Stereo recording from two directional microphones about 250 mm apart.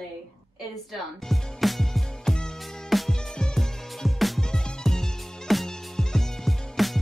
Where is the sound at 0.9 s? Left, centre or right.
Centre.